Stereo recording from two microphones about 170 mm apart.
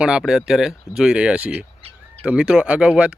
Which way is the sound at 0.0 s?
5° right (ahead or behind).